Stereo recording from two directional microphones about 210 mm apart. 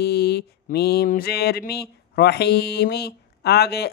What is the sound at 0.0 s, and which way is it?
Mantra, 50° left (ahead or behind).